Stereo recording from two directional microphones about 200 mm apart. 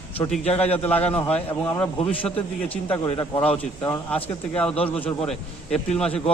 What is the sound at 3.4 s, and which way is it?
Speech, 10° left (ahead or behind).